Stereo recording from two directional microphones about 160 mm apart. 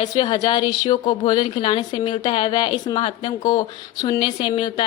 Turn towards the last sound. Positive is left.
turn(degrees=35)  # may be behind; listen again after turning